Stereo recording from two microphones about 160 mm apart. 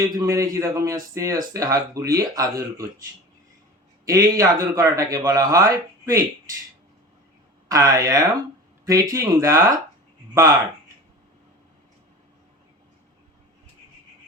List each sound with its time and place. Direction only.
0.0 s a man's voice: 20° right (ahead or behind)
4.0 s a man's voice: 20° right (ahead or behind)
7.7 s a man's voice: 20° right (ahead or behind)